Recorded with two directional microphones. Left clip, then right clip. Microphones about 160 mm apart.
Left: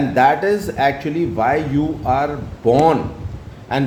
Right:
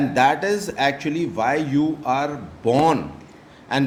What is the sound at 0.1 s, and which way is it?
A man's voice, 30° right (ahead or behind).